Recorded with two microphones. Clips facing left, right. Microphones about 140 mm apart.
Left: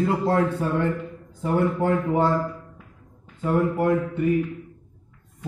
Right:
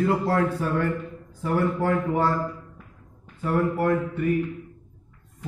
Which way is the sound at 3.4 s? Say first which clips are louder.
Left 2 dB; 20° left (ahead or behind).